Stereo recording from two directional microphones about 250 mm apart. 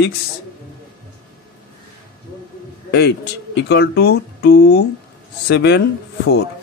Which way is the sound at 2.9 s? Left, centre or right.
Left.